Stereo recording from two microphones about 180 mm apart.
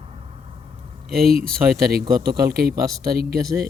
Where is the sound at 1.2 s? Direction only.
55° right (ahead or behind).